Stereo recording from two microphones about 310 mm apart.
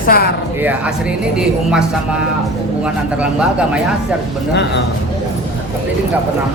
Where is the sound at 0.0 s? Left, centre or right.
Left.